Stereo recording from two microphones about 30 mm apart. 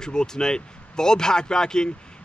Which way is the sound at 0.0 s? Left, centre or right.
Left.